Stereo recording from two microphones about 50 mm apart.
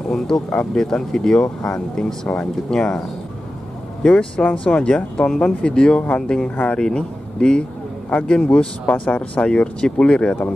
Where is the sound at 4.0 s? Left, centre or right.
Centre.